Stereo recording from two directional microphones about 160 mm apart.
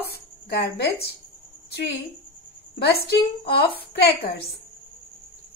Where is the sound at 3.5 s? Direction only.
85° left.